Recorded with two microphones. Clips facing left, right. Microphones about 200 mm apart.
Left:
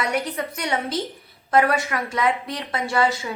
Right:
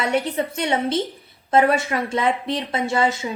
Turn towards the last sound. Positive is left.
turn(degrees=-20)  # may be behind; listen again after turning